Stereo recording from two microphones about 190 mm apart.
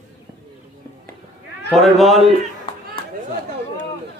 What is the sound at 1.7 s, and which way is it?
Speech, centre (ahead or behind).